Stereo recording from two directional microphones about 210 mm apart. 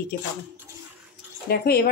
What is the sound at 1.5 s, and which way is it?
Speech, 45° left (ahead or behind).